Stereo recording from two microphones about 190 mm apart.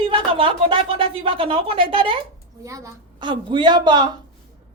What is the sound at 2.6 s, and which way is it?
A woman's voice, 15° right (ahead or behind).